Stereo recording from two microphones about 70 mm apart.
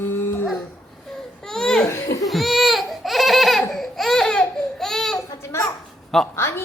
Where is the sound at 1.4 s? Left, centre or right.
Centre.